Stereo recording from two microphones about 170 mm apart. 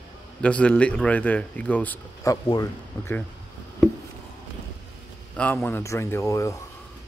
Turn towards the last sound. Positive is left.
turn(degrees=20)  # may be behind; listen again after turning